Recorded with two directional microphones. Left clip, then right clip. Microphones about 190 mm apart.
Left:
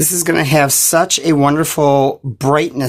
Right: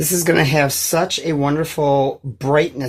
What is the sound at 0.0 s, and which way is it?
Speech, 55° left (ahead or behind).